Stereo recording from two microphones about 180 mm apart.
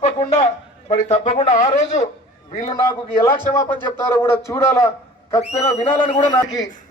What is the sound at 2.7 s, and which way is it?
Speech, 20° left (ahead or behind).